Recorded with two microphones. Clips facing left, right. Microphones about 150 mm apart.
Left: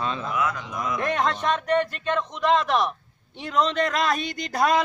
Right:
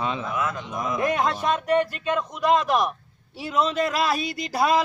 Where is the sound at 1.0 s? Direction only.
10° right (ahead or behind).